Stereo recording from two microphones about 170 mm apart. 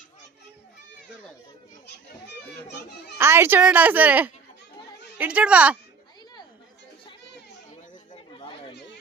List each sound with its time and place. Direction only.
2.2 s a child's voice: 85° left
3.2 s a woman's voice: 15° right (ahead or behind)
8.1 s chatter: 30° left (ahead or behind)